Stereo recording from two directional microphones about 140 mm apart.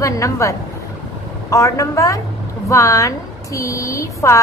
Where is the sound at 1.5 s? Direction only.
25° left (ahead or behind).